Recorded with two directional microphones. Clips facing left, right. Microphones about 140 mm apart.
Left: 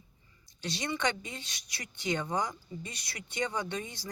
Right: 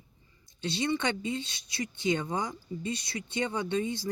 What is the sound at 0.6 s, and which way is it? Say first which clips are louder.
Speech: right 3 dB; 25° right (ahead or behind).